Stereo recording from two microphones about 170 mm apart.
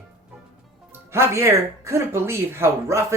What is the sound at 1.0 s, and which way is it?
Speech, 15° right (ahead or behind).